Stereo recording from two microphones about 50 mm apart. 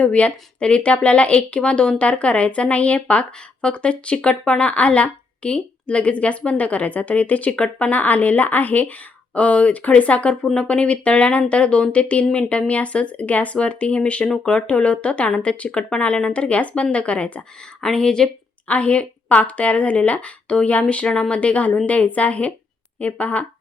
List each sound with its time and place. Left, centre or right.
0.0 s a woman's voice: left
17.7 s a woman's voice: centre